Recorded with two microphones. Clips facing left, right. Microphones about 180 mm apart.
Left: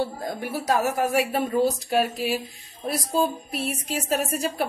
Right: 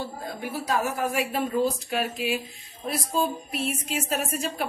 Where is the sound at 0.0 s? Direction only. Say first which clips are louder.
Left 5 dB; 40° left (ahead or behind).